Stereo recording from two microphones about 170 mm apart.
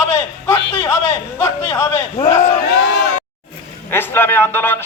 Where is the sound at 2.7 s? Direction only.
90° left.